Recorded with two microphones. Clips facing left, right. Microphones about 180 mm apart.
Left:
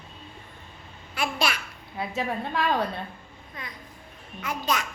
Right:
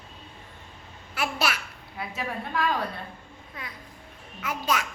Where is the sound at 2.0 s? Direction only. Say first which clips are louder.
Left 4 dB; 25° left (ahead or behind).